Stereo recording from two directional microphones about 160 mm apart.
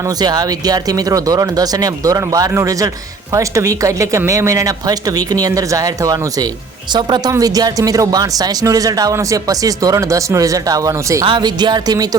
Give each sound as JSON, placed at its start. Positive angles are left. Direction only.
{"t": 0.2, "sound": "speech", "side_deg": -25}